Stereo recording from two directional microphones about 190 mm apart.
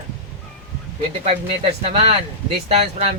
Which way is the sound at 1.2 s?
30° right (ahead or behind).